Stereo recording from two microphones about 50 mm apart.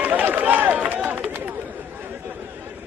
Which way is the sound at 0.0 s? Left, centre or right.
Right.